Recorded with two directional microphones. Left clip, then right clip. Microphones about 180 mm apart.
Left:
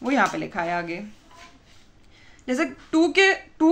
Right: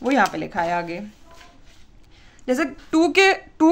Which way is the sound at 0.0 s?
25° right (ahead or behind).